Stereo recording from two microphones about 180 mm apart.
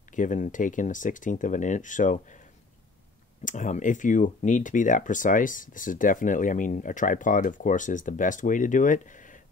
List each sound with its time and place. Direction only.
0.1 s speech: 45° left (ahead or behind)
3.4 s speech: 45° left (ahead or behind)